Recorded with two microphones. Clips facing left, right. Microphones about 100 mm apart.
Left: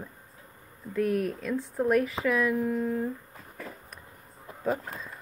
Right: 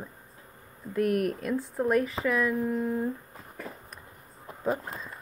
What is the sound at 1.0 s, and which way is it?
Speech, 65° right (ahead or behind).